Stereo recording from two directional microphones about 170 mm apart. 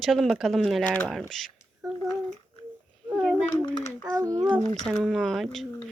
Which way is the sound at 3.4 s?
10° left (ahead or behind).